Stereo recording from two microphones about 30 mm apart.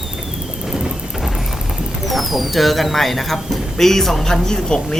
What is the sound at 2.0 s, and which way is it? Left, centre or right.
Speech, centre.